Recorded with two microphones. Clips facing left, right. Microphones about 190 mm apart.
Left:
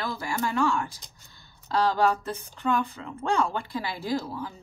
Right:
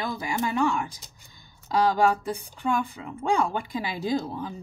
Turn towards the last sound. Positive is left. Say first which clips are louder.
# right 2 dB
turn(degrees=-20)  # may be behind; listen again after turning